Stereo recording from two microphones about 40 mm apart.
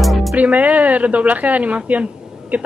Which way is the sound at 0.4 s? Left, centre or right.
Right.